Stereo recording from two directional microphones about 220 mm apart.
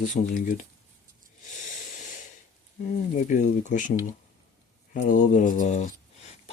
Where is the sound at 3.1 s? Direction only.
35° left (ahead or behind).